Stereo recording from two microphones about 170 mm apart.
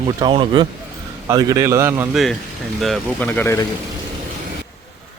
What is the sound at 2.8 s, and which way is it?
Speech, centre (ahead or behind).